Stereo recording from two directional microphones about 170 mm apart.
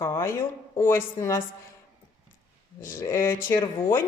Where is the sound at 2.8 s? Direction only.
15° left (ahead or behind).